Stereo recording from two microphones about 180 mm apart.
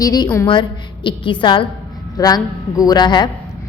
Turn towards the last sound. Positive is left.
turn(degrees=25)  # may be behind; listen again after turning